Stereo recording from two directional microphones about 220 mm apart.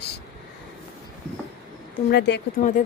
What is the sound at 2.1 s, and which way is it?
Speech, 50° left (ahead or behind).